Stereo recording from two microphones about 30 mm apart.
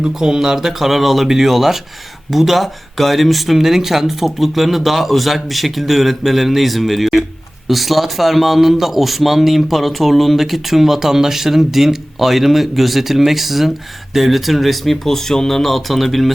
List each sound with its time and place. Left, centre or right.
0.2 s a man's voice: right; by 14.9 s centre
15.0 s speech: centre